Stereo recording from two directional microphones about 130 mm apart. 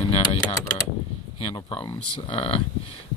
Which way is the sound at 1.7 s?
40° left (ahead or behind).